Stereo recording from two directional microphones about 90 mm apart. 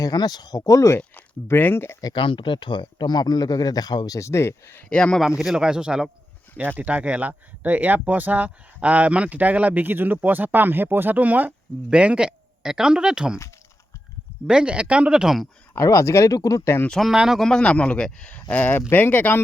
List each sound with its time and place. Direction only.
0.0 s speech: 50° left (ahead or behind); by 2.0 s 25° left (ahead or behind)
2.1 s speech: 75° left (ahead or behind); by 4.9 s 25° left (ahead or behind)
4.9 s speech: 15° left (ahead or behind)
5.2 s speech: 5° right (ahead or behind)
14.4 s speech: 10° right (ahead or behind)
15.7 s speech: 35° left (ahead or behind)
16.9 s speech: centre (ahead or behind)
17.4 s speech: 10° left (ahead or behind)